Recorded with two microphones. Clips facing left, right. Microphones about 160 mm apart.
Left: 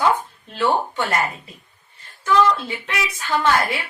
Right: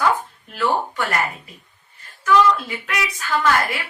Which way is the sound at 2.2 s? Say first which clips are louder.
Right 1 dB; 25° left (ahead or behind).